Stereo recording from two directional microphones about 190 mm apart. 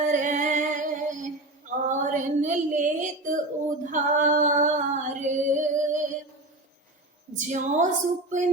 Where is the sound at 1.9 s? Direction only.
40° right (ahead or behind).